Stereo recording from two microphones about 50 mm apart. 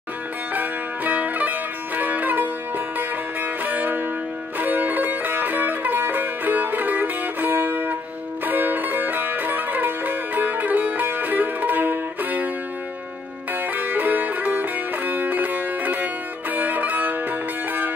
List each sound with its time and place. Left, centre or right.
0.6 s music: right
3.6 s music: right
13.5 s music: right